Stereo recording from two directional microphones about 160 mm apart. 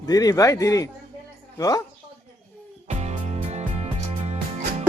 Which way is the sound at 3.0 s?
45° right (ahead or behind).